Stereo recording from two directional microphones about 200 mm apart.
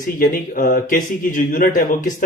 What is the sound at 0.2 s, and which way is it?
Speech, 45° left (ahead or behind).